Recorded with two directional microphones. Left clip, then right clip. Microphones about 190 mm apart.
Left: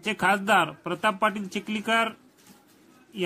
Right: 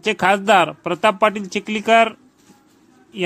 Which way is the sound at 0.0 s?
20° right (ahead or behind).